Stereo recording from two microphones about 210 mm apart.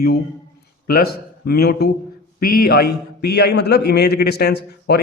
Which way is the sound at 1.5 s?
50° left (ahead or behind).